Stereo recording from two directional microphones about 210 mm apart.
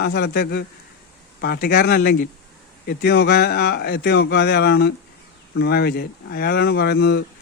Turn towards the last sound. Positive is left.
turn(degrees=50)  # may be behind; listen again after turning